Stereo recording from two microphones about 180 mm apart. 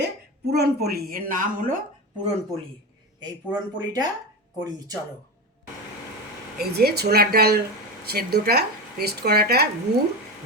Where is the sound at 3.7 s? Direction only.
20° right (ahead or behind).